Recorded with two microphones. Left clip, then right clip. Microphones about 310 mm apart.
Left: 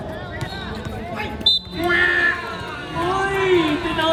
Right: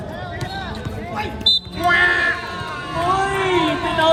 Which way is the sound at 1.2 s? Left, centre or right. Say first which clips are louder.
Right 1 dB; centre.